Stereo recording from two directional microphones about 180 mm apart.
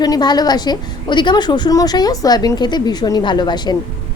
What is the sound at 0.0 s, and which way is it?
A woman's voice, 25° left (ahead or behind).